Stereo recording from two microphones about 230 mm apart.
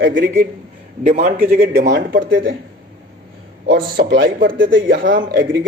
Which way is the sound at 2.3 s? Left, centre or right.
Right.